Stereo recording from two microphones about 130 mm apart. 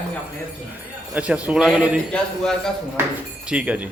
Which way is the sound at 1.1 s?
10° right (ahead or behind).